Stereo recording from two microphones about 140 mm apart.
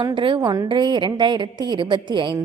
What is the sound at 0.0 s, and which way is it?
A woman's voice, 35° right (ahead or behind).